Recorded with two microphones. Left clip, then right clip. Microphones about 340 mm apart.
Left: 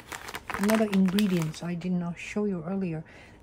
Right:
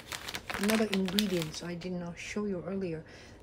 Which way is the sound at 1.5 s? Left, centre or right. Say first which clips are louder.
Left 4 dB; centre.